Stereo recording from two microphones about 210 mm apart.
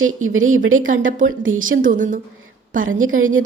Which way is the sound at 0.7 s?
40° right (ahead or behind).